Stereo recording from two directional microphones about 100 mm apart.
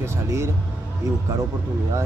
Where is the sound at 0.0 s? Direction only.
25° right (ahead or behind).